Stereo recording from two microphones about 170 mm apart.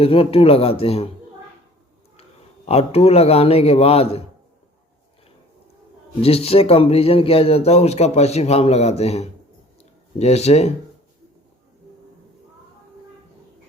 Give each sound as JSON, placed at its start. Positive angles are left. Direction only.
{"t": 0.0, "sound": "speech", "side_deg": 35}
{"t": 2.6, "sound": "speech", "side_deg": 35}
{"t": 6.2, "sound": "speech", "side_deg": 35}